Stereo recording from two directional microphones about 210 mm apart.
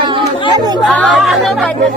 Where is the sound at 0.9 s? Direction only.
Centre (ahead or behind).